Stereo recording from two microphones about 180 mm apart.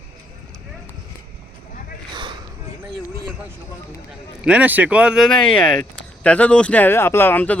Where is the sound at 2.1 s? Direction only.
25° right (ahead or behind).